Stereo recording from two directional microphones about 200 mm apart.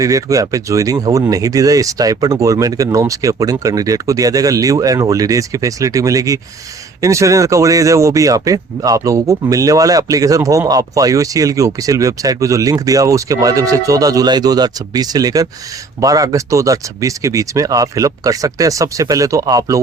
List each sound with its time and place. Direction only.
0.0 s speech: 15° right (ahead or behind)